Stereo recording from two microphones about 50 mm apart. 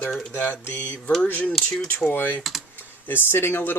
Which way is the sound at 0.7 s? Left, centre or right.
Left.